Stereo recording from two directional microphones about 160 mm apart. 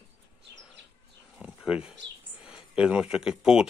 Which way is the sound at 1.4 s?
5° right (ahead or behind).